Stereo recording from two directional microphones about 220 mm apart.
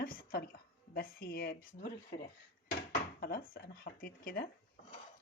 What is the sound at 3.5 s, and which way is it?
Speech, 45° left (ahead or behind).